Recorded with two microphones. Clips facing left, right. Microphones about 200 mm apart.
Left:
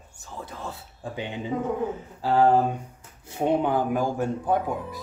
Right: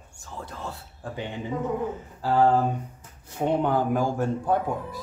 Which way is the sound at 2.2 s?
15° left (ahead or behind).